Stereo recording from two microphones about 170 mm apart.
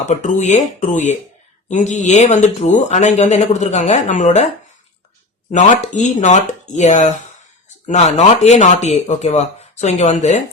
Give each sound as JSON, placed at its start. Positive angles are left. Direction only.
{"t": 0.0, "sound": "speech", "side_deg": 45}
{"t": 5.5, "sound": "speech", "side_deg": 45}